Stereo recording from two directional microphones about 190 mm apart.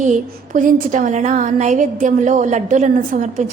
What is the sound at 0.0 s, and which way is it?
A woman's voice, 40° right (ahead or behind).